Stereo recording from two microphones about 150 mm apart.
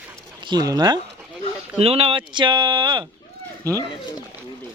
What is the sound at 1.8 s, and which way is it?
Speech, 40° right (ahead or behind).